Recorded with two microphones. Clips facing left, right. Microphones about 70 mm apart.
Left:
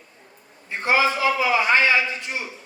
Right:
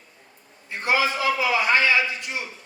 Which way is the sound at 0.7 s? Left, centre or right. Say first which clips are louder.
Left 2 dB; left.